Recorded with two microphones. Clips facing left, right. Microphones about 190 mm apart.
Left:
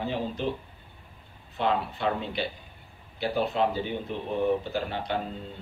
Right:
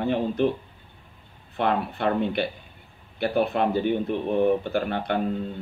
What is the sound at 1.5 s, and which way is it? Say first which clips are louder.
A man's voice: right 3 dB; 60° right (ahead or behind).